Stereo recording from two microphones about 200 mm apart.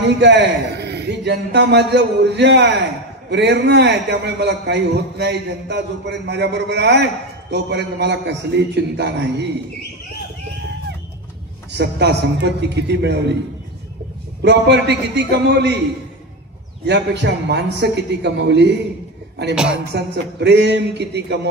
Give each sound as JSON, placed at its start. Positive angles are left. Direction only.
{"t": 0.0, "sound": "a man's voice", "side_deg": -60}
{"t": 11.7, "sound": "a man's voice", "side_deg": -55}
{"t": 14.4, "sound": "a man's voice", "side_deg": -60}
{"t": 16.8, "sound": "a man's voice", "side_deg": -60}
{"t": 19.5, "sound": "speech", "side_deg": -5}
{"t": 19.9, "sound": "a man's voice", "side_deg": -55}